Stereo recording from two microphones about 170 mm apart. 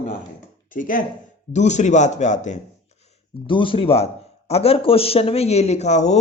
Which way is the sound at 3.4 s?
30° left (ahead or behind).